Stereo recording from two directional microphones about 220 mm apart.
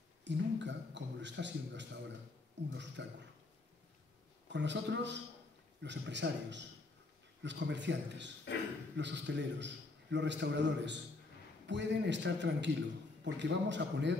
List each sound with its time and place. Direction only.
0.2 s a man's voice: 55° right (ahead or behind)
4.5 s a man's voice: 55° right (ahead or behind)